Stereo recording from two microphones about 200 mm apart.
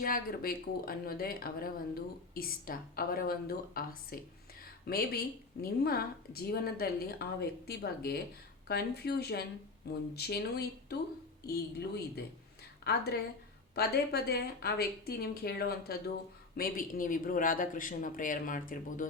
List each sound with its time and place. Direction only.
0.0 s a woman's voice: 45° left (ahead or behind)